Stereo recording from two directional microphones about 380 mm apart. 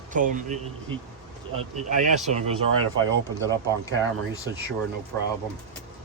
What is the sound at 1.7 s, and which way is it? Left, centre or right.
Speech, centre.